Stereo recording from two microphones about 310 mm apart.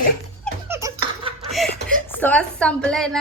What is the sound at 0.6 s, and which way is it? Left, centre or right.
Laughter, centre.